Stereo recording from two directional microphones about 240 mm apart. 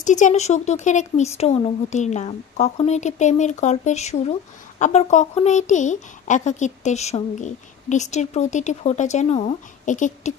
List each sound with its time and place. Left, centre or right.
0.0 s speech: left